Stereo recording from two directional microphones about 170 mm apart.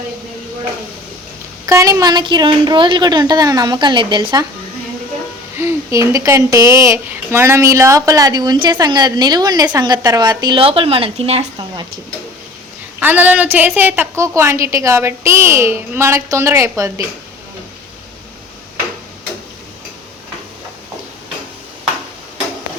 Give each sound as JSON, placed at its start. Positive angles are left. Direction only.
{"t": 1.6, "sound": "a woman's voice", "side_deg": -20}
{"t": 5.5, "sound": "a woman's voice", "side_deg": -15}
{"t": 13.0, "sound": "a woman's voice", "side_deg": -10}